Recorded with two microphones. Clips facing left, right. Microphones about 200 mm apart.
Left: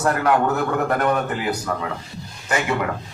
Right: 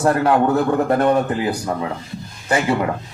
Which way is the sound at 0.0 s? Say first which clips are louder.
Right 3 dB; 30° right (ahead or behind).